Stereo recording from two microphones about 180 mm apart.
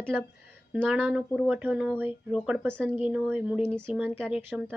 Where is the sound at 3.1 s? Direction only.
5° right (ahead or behind).